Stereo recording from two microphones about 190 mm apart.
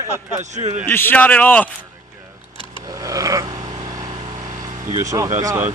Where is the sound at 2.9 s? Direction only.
15° right (ahead or behind).